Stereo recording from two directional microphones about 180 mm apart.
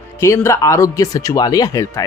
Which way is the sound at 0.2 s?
15° left (ahead or behind).